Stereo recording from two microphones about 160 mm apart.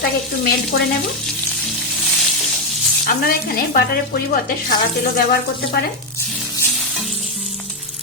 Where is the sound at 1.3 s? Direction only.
Centre (ahead or behind).